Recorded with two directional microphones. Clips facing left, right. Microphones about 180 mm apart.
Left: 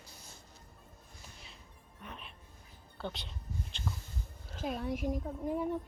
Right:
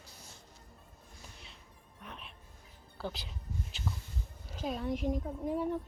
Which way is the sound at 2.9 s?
5° right (ahead or behind).